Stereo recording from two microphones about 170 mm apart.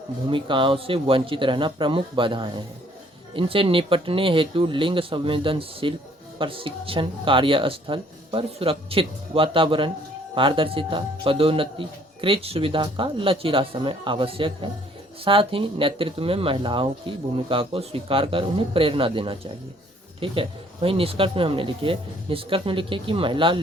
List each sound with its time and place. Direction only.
0.3 s a man's voice: 30° right (ahead or behind)